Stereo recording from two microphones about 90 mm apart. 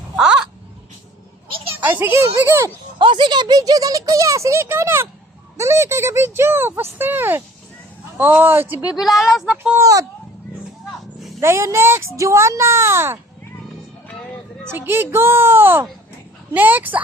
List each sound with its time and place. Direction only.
0.2 s a sound: 10° right (ahead or behind)
1.8 s speech: 20° right (ahead or behind)
3.0 s speech: 60° right (ahead or behind); by 8.8 s 20° right (ahead or behind)
9.0 s speech: centre (ahead or behind)
9.7 s speech: 35° right (ahead or behind)
11.3 s speech: 30° right (ahead or behind)
14.6 s speech: 25° right (ahead or behind)